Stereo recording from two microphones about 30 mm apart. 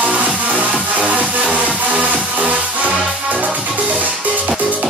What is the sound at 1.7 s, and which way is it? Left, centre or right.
Music, right.